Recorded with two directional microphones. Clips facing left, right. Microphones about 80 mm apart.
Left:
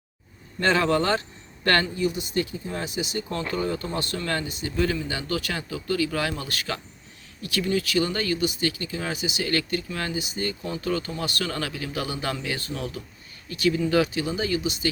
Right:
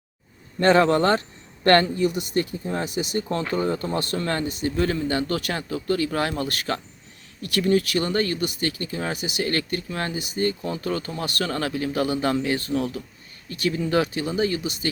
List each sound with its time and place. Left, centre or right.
0.6 s speech: right
9.1 s speech: right